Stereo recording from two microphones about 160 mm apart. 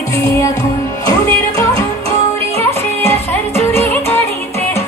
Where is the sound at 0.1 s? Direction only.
20° left (ahead or behind).